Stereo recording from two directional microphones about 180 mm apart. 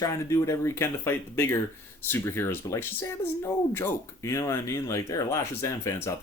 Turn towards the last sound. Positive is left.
turn(degrees=15)  # may be behind; listen again after turning